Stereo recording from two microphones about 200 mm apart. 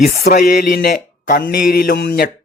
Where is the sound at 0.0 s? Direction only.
40° left (ahead or behind).